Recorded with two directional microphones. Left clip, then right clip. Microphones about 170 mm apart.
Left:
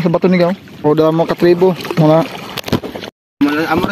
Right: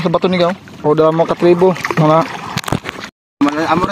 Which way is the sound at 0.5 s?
25° left (ahead or behind).